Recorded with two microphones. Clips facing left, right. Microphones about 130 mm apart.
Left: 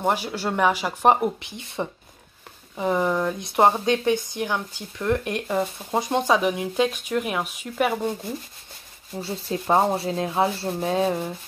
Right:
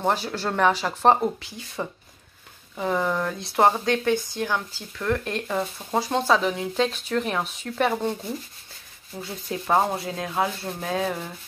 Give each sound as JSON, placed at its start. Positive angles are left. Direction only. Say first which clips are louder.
{"t": 0.0, "sound": "speech", "louder": "left 1 dB", "side_deg": 10}
{"t": 9.2, "sound": "rub", "louder": "left 3 dB", "side_deg": 30}